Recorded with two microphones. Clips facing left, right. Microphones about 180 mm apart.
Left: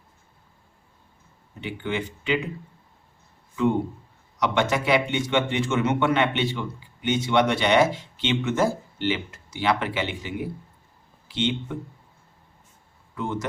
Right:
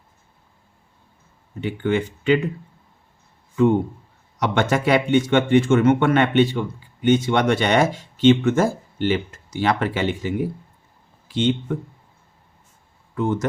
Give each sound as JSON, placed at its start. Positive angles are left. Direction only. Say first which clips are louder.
{"t": 1.6, "sound": "speech", "louder": "right 7 dB", "side_deg": -50}
{"t": 4.4, "sound": "speech", "louder": "right 3 dB", "side_deg": -50}
{"t": 13.1, "sound": "speech", "louder": "right 7 dB", "side_deg": -50}